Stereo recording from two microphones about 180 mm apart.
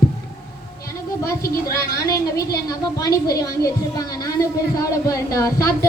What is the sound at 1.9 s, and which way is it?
A woman's voice, 20° left (ahead or behind).